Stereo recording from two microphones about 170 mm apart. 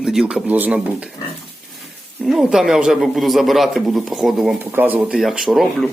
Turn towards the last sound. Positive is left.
turn(degrees=0)  # may be behind; listen again after turning